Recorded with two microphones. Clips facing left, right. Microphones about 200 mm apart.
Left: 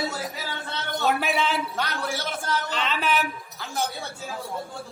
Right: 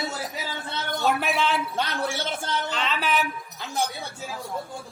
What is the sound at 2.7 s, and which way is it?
Music, centre (ahead or behind).